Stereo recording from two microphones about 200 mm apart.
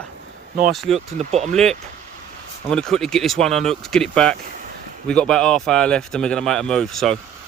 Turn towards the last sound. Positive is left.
turn(degrees=0)  # may be behind; listen again after turning